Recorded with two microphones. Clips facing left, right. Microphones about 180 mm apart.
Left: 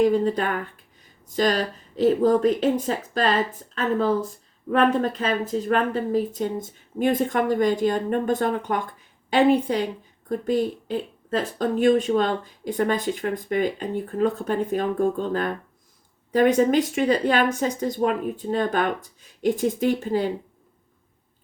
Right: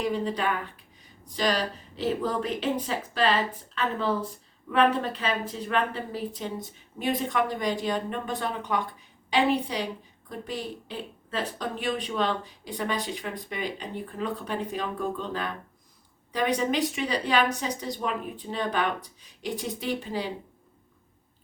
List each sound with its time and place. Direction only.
0.0 s a woman's voice: 45° left (ahead or behind)